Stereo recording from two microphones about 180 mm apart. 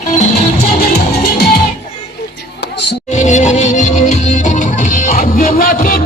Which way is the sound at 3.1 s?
45° left (ahead or behind).